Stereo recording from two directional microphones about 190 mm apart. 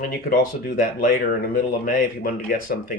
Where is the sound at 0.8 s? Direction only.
50° left (ahead or behind).